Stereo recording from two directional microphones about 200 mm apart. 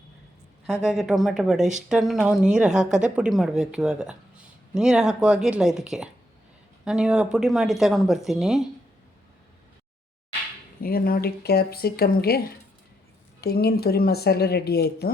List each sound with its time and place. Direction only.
0.7 s speech: centre (ahead or behind)
10.8 s speech: 50° left (ahead or behind)
13.4 s speech: 50° left (ahead or behind)